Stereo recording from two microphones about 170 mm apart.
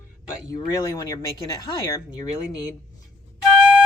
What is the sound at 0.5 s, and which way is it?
Speech, 20° left (ahead or behind).